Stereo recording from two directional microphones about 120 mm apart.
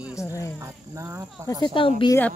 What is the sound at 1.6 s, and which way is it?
Speech, 45° left (ahead or behind).